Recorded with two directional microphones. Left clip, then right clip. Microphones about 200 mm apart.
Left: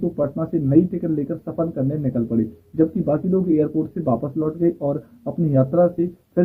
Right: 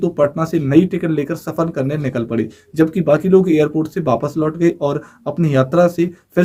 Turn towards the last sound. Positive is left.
turn(degrees=-15)  # may be behind; listen again after turning